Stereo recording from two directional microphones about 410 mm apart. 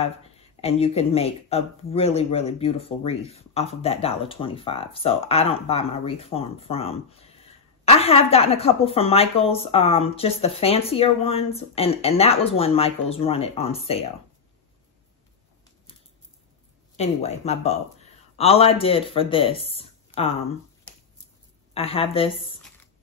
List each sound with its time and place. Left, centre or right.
0.6 s a woman's voice: centre
16.9 s a woman's voice: centre
21.7 s a woman's voice: centre